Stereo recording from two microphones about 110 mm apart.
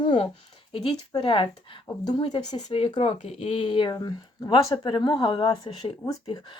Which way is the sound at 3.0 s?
65° left (ahead or behind).